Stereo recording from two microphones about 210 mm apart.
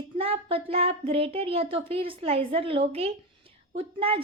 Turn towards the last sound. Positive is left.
turn(degrees=-25)  # may be behind; listen again after turning